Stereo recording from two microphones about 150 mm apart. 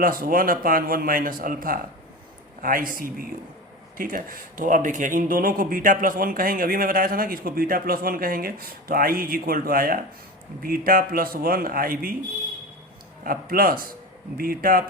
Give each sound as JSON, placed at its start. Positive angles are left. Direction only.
{"t": 0.0, "sound": "speech", "side_deg": -70}
{"t": 13.2, "sound": "speech", "side_deg": -75}